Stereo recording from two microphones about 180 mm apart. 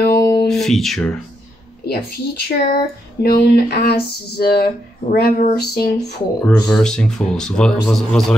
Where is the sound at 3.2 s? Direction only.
60° left (ahead or behind).